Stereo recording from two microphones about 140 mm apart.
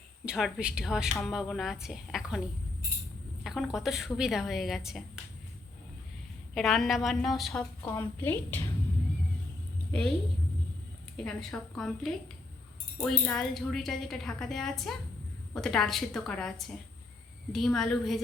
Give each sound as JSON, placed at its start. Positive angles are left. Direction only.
{"t": 0.3, "sound": "a woman's voice", "side_deg": 0}
{"t": 3.4, "sound": "a woman's voice", "side_deg": 0}
{"t": 6.5, "sound": "a woman's voice", "side_deg": 0}
{"t": 7.9, "sound": "a woman's voice", "side_deg": 20}
{"t": 9.9, "sound": "a woman's voice", "side_deg": 5}
{"t": 11.2, "sound": "a woman's voice", "side_deg": 5}